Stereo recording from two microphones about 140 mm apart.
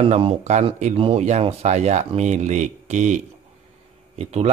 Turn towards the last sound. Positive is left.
turn(degrees=-50)  # may be behind; listen again after turning